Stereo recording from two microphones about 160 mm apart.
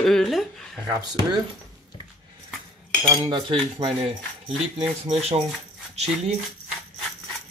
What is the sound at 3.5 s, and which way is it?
Speech, 35° right (ahead or behind).